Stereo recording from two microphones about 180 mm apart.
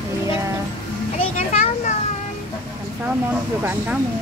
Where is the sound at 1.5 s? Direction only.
40° left (ahead or behind).